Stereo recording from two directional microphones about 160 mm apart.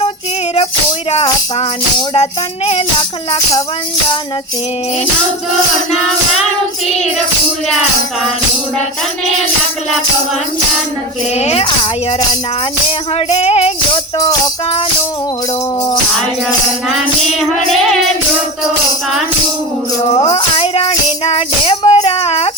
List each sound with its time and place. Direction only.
1.1 s music: 40° left (ahead or behind)
11.3 s music: 40° left (ahead or behind)
13.1 s music: 40° left (ahead or behind)
14.2 s music: 20° left (ahead or behind)
17.7 s music: centre (ahead or behind)
20.3 s music: 35° left (ahead or behind)